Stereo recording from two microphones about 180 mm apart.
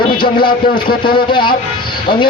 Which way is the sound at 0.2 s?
25° left (ahead or behind).